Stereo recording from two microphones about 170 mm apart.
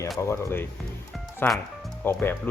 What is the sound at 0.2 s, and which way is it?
Speech, 15° left (ahead or behind).